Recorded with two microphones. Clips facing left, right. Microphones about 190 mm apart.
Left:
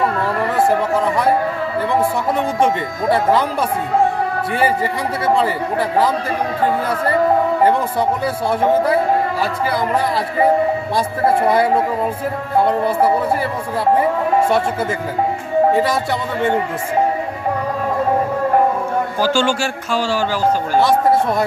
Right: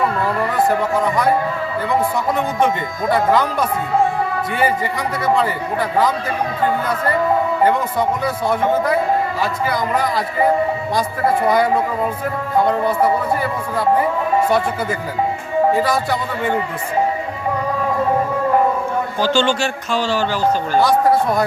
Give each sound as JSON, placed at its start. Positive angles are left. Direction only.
{"t": 0.7, "sound": "speech", "side_deg": 30}
{"t": 3.1, "sound": "speech", "side_deg": 30}
{"t": 7.6, "sound": "speech", "side_deg": 30}
{"t": 11.4, "sound": "speech", "side_deg": 30}
{"t": 15.7, "sound": "speech", "side_deg": 25}
{"t": 19.2, "sound": "a man's voice", "side_deg": 10}